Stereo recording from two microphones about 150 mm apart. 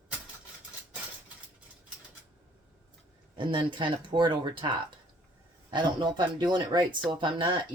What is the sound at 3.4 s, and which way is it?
Speech, 30° right (ahead or behind).